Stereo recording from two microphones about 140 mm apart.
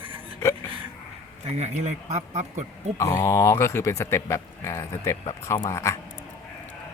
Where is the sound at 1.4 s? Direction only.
50° right (ahead or behind).